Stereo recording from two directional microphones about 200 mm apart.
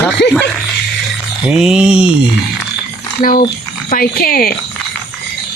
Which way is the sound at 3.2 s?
45° left (ahead or behind).